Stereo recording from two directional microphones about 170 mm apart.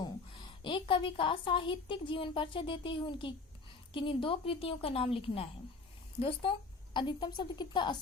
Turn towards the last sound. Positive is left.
turn(degrees=25)  # may be behind; listen again after turning